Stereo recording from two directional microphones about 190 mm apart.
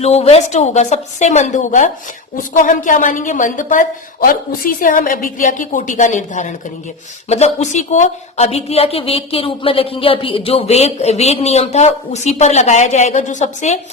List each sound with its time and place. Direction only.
0.0 s a woman's voice: 35° left (ahead or behind)